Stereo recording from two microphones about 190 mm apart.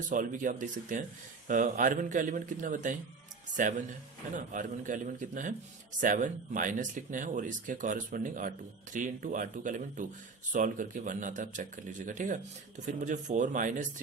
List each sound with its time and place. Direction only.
0.1 s a man's voice: 45° right (ahead or behind)